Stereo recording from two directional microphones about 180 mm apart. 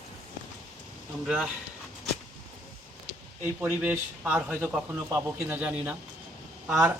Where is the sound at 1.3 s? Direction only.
5° right (ahead or behind).